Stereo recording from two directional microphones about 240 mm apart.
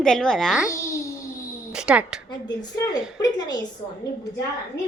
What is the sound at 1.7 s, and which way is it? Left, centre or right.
Speech, centre.